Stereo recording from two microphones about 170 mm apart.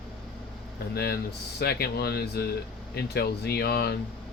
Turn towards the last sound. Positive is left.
turn(degrees=70)  # may be behind; listen again after turning